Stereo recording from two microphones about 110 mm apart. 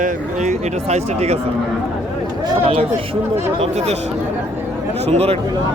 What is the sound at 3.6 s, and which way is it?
Speech, 75° right (ahead or behind).